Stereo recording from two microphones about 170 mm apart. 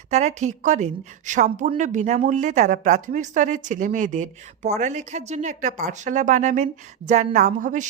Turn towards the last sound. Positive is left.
turn(degrees=-50)  # may be behind; listen again after turning